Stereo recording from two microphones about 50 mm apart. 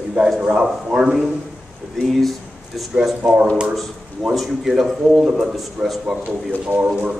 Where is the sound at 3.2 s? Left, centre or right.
Centre.